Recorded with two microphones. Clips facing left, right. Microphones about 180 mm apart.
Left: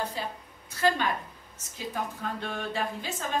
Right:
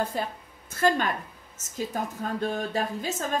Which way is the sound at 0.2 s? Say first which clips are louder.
Right 4 dB; 50° right (ahead or behind).